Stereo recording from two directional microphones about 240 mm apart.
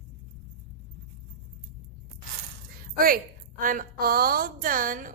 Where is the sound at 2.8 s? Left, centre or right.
Right.